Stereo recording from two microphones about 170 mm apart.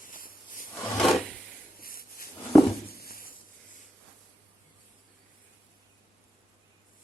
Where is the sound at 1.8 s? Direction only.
60° left (ahead or behind).